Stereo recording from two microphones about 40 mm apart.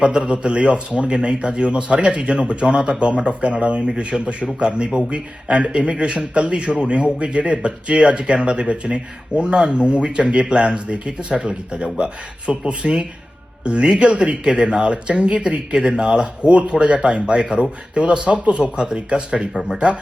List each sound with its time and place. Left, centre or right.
0.0 s a man's voice: right